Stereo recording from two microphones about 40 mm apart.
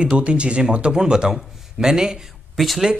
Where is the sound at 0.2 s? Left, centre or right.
Right.